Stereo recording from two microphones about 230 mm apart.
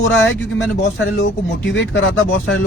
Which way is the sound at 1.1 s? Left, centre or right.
Left.